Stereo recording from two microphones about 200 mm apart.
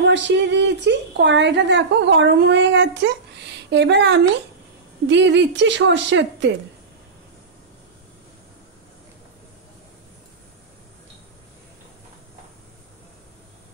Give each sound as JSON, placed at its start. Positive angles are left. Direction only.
{"t": 0.0, "sound": "a woman's voice", "side_deg": -60}